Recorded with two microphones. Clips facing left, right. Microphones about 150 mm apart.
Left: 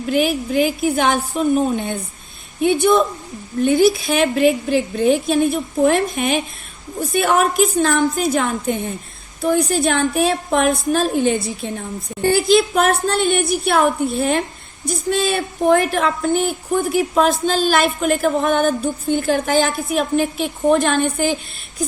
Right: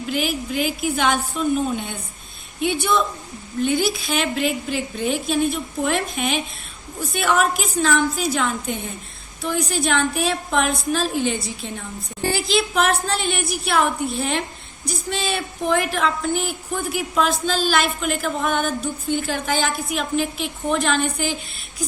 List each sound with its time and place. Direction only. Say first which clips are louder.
0.1 s a woman's voice: left 7 dB; 50° left (ahead or behind)